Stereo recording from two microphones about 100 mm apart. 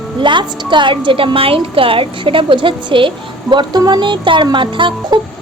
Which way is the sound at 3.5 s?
45° right (ahead or behind).